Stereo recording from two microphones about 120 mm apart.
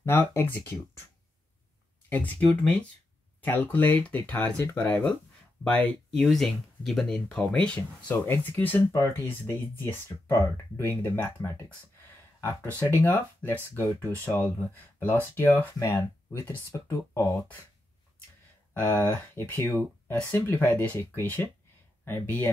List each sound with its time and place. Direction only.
0.0 s speech: 20° left (ahead or behind)
2.0 s speech: 15° left (ahead or behind)
12.6 s speech: 15° left (ahead or behind)
14.4 s speech: 15° left (ahead or behind)
18.7 s speech: 15° left (ahead or behind)